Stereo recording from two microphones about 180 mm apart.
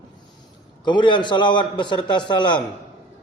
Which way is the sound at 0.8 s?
25° left (ahead or behind).